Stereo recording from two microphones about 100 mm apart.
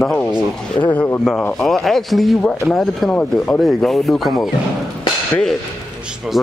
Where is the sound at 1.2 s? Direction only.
10° left (ahead or behind).